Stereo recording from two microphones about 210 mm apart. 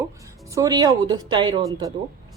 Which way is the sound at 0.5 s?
15° right (ahead or behind).